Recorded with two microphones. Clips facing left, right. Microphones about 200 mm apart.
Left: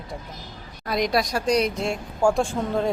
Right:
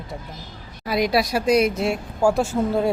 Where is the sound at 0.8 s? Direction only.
5° right (ahead or behind).